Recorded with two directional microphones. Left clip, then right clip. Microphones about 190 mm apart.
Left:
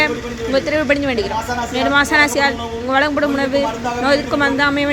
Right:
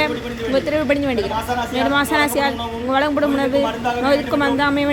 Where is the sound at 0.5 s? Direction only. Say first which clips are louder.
Left 2 dB; 5° right (ahead or behind).